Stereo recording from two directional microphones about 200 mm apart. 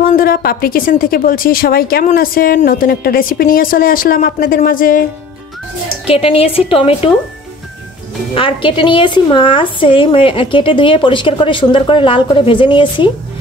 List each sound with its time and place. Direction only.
0.0 s a woman's voice: 45° left (ahead or behind)
6.0 s a woman's voice: 30° left (ahead or behind)
8.4 s a woman's voice: 25° left (ahead or behind)